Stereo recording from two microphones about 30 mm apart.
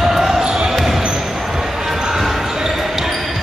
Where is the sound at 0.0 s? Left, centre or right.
Centre.